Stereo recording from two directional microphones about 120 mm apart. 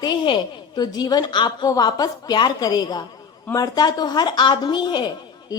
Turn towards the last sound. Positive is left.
turn(degrees=40)  # may be behind; listen again after turning